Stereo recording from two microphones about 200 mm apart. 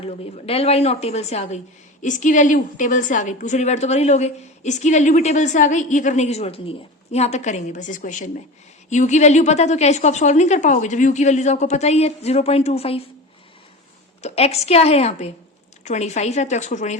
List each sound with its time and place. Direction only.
0.0 s a woman's voice: 30° left (ahead or behind)
14.2 s a woman's voice: 30° left (ahead or behind)